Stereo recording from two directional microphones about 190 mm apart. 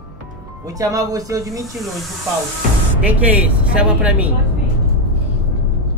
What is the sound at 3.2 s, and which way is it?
Speech, 10° right (ahead or behind).